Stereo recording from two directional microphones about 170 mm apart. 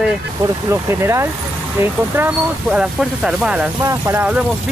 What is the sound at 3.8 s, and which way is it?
Speech, 20° right (ahead or behind).